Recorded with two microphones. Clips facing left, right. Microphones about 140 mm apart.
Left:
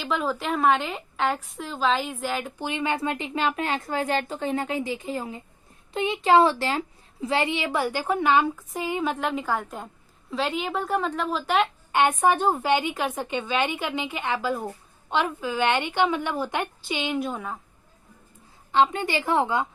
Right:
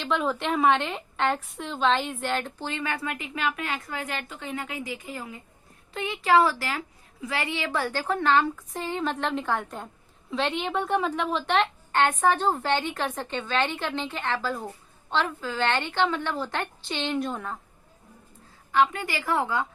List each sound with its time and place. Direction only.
0.0 s a woman's voice: centre (ahead or behind)
18.7 s a woman's voice: 25° left (ahead or behind)